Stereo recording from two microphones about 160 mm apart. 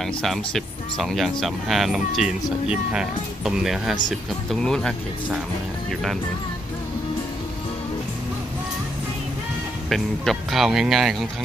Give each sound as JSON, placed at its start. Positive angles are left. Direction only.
{"t": 0.0, "sound": "speech", "side_deg": 0}
{"t": 9.8, "sound": "speech", "side_deg": 0}